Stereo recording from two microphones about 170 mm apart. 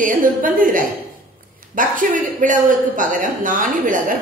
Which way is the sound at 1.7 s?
50° right (ahead or behind).